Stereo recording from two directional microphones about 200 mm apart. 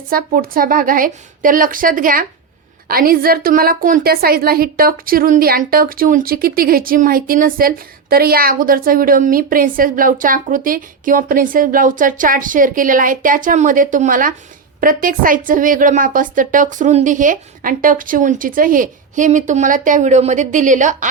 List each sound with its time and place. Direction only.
0.1 s a woman's voice: 45° right (ahead or behind)